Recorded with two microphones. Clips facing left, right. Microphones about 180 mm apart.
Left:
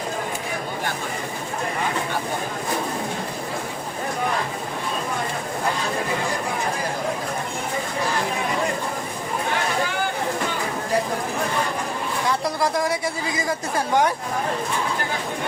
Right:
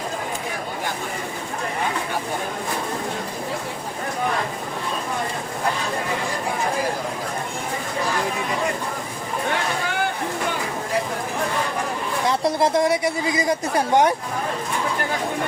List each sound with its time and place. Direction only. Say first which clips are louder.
12.3 s a woman's voice: right 4 dB; 20° right (ahead or behind)